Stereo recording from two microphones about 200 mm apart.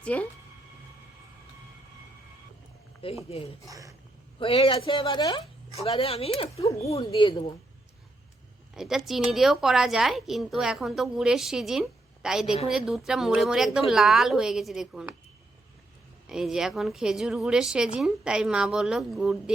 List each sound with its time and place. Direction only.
0.0 s speech: 5° left (ahead or behind)
3.0 s speech: 30° left (ahead or behind)
3.7 s speech: 15° right (ahead or behind)
4.4 s speech: 30° left (ahead or behind)
8.7 s a woman's voice: centre (ahead or behind)
16.2 s a woman's voice: centre (ahead or behind)